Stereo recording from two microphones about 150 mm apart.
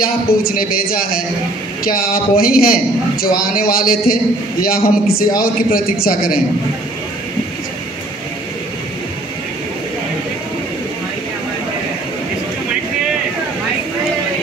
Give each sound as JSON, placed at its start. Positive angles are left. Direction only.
{"t": 0.0, "sound": "a man's voice", "side_deg": 80}